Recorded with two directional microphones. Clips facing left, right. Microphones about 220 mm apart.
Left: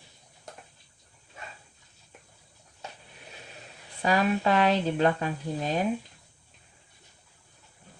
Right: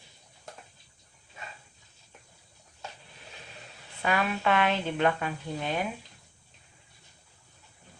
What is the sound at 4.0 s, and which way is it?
Speech, 35° left (ahead or behind).